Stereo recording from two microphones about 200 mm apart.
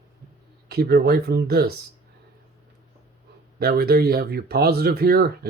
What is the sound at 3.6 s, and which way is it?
Speech, 50° right (ahead or behind).